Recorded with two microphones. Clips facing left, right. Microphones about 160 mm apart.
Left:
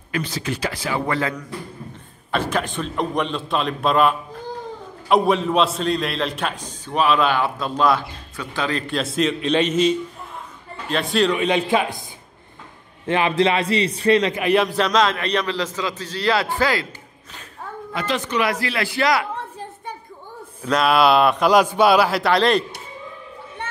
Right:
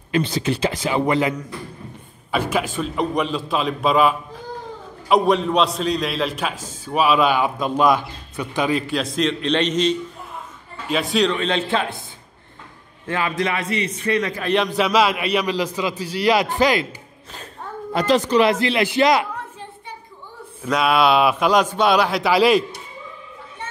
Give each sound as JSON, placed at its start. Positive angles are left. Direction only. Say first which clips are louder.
{"t": 0.1, "sound": "a man's voice", "louder": "right 5 dB", "side_deg": -25}
{"t": 2.5, "sound": "a man's voice", "louder": "right 1 dB", "side_deg": -5}
{"t": 8.8, "sound": "a man's voice", "louder": "even", "side_deg": 0}
{"t": 11.3, "sound": "a man's voice", "louder": "left 2 dB", "side_deg": 10}
{"t": 13.0, "sound": "a man's voice", "louder": "left 4 dB", "side_deg": 20}
{"t": 14.4, "sound": "a man's voice", "louder": "left 1 dB", "side_deg": 5}
{"t": 17.9, "sound": "a man's voice", "louder": "right 7 dB", "side_deg": -40}
{"t": 20.6, "sound": "a man's voice", "louder": "left 1 dB", "side_deg": 0}